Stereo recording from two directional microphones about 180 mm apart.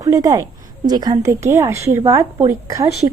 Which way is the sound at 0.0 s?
20° right (ahead or behind).